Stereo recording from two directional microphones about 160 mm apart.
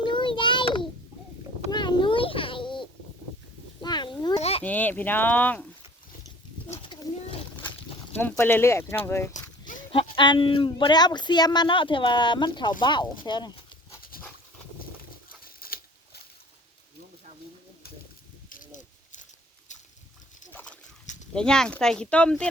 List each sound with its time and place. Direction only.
0.0 s child singing: 30° left (ahead or behind)
1.7 s babbling: 30° left (ahead or behind)
3.8 s a sound: 25° left (ahead or behind)
4.4 s a sound: 40° left (ahead or behind)
4.6 s speech: 10° left (ahead or behind)
6.7 s pigeon: 30° left (ahead or behind)
8.2 s speech: 15° left (ahead or behind)
9.9 s speech: 30° left (ahead or behind)
14.1 s dog: 65° left (ahead or behind)
15.4 s patter: 65° left (ahead or behind)
18.4 s a sound: 55° left (ahead or behind)
20.5 s a sound: 10° left (ahead or behind)
21.3 s speech: 5° left (ahead or behind)